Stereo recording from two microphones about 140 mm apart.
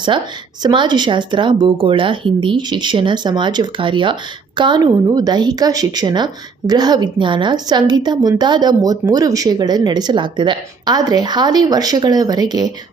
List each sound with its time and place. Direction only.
0.6 s speech: 35° right (ahead or behind)